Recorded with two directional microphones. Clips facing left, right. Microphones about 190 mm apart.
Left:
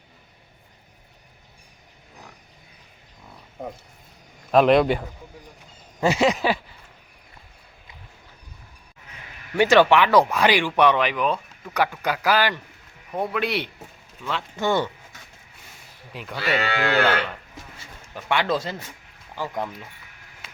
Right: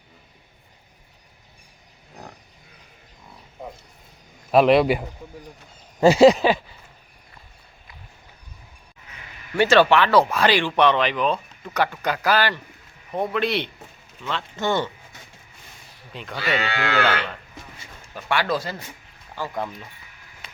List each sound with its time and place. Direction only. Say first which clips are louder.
4.5 s a man's voice: right 1 dB; 5° right (ahead or behind)
6.0 s a sound: right 7 dB; 35° right (ahead or behind)
9.6 s speech: even; 15° left (ahead or behind)
16.1 s speech: even; 5° left (ahead or behind)
16.6 s speech: left 3 dB; 40° left (ahead or behind)
18.1 s speech: even; 20° left (ahead or behind)
20.4 s a sound: right 1 dB; 5° left (ahead or behind)